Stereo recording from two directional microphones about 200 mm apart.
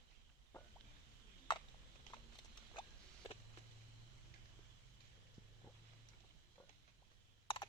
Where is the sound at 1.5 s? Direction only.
25° left (ahead or behind).